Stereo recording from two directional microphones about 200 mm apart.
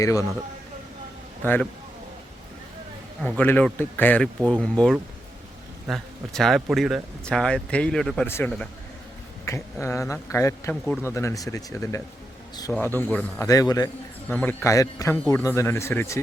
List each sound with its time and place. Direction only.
0.0 s a man's voice: 15° left (ahead or behind)
3.2 s a man's voice: 10° left (ahead or behind)
14.3 s a man's voice: 10° left (ahead or behind)